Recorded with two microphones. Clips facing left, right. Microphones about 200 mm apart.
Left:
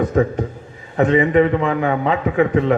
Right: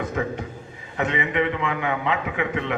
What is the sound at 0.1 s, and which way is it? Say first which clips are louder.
A man's voice: left 9 dB; 40° left (ahead or behind).